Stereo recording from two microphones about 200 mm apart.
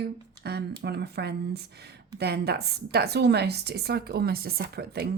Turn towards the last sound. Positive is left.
turn(degrees=-55)  # may be behind; listen again after turning